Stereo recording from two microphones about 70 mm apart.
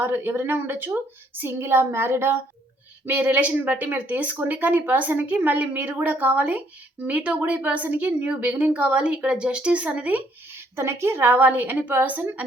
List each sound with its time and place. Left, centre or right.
0.0 s a woman's voice: right
3.1 s speech: right
10.8 s speech: right